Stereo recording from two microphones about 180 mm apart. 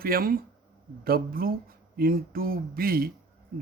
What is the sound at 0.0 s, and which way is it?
A man's voice, 55° right (ahead or behind).